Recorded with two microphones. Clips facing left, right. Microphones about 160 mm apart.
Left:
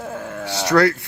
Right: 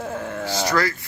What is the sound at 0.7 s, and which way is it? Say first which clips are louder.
Speech: left 8 dB; 65° left (ahead or behind).